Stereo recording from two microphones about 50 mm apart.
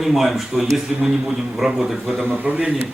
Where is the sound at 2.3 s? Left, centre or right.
Right.